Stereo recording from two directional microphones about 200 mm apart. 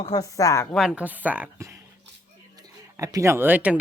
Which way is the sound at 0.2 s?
15° left (ahead or behind).